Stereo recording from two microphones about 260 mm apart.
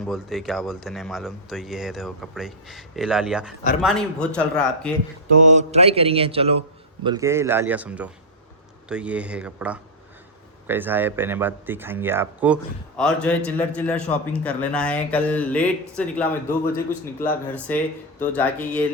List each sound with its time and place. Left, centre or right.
0.0 s a man's voice: centre
5.5 s a man's voice: right; by 12.5 s centre
13.0 s a man's voice: centre